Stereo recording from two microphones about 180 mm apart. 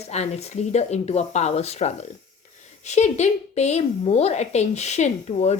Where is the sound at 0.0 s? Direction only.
35° left (ahead or behind).